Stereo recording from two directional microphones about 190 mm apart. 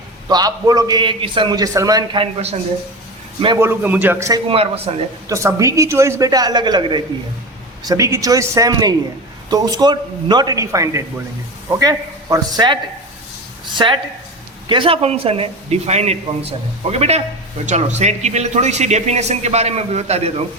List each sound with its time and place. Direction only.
0.3 s a man's voice: 20° right (ahead or behind)
3.6 s a man's voice: 10° right (ahead or behind)
4.4 s a man's voice: 30° right (ahead or behind)
5.3 s a man's voice: 15° right (ahead or behind); by 20.3 s 35° right (ahead or behind)